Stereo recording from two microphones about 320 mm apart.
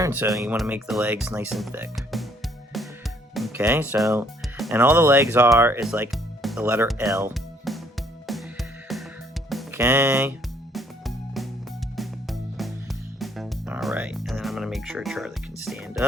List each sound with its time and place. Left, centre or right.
0.0 s speech: centre
2.7 s music: centre
3.3 s speech: centre
8.3 s music: centre
9.5 s speech: centre
10.8 s music: centre